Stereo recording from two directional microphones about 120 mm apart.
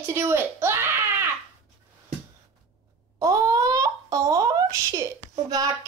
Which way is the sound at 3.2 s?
30° right (ahead or behind).